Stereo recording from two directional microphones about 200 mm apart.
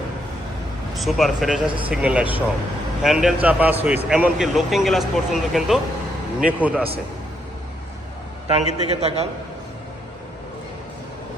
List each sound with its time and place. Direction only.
0.9 s a man's voice: centre (ahead or behind)
8.5 s a man's voice: 30° right (ahead or behind)